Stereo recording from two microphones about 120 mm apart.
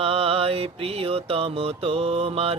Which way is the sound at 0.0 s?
55° right (ahead or behind).